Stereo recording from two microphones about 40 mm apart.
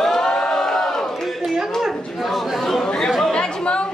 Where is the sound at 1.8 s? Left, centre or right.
Centre.